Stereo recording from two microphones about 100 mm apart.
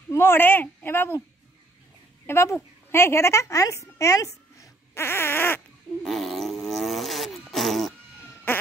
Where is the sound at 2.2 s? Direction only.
25° left (ahead or behind).